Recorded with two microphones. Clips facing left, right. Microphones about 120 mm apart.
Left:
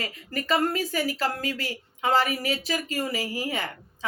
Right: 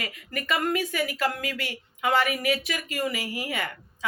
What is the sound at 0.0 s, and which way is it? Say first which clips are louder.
Speech: left 2 dB; 30° left (ahead or behind).